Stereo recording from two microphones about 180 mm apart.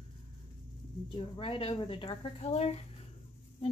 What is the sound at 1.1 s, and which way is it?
Speech, 30° left (ahead or behind).